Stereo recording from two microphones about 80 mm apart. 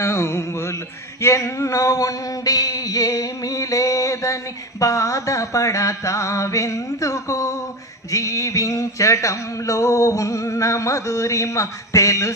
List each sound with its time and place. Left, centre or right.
0.0 s music: left
1.2 s a sound: left
8.1 s music: left